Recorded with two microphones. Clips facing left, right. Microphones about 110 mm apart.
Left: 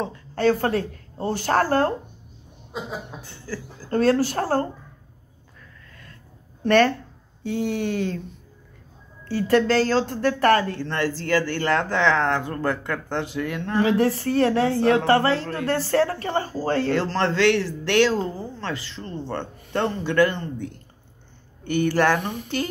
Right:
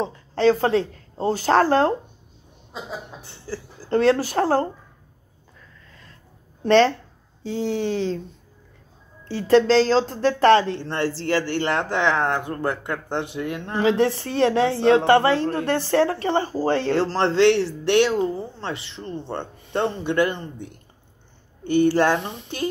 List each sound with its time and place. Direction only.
0.0 s speech: 25° right (ahead or behind)
3.3 s speech: 25° right (ahead or behind)
6.6 s speech: 25° right (ahead or behind)
9.2 s speech: 25° right (ahead or behind)